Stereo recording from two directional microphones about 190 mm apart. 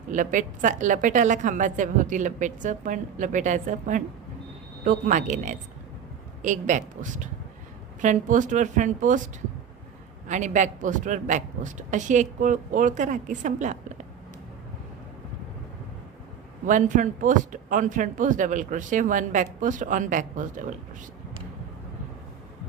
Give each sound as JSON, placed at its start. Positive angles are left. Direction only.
{"t": 0.1, "sound": "a woman's voice", "side_deg": -45}
{"t": 10.2, "sound": "a woman's voice", "side_deg": -40}
{"t": 16.6, "sound": "speech", "side_deg": -40}